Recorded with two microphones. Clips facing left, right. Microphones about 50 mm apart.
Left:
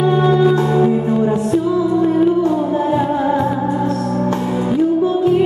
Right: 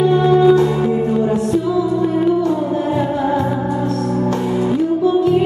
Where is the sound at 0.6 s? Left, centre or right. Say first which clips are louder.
Left 1 dB; centre.